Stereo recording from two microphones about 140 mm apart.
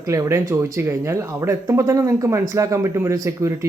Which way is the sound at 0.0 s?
20° right (ahead or behind).